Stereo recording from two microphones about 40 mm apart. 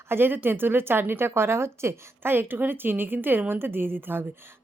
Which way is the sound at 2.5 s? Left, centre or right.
Right.